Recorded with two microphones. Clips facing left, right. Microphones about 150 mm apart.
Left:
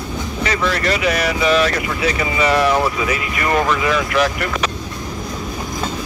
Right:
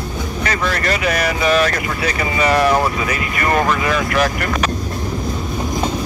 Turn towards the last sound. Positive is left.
turn(degrees=-50)  # may be behind; listen again after turning